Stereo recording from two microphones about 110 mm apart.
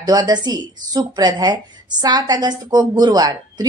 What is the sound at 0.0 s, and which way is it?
A woman's voice, 40° right (ahead or behind).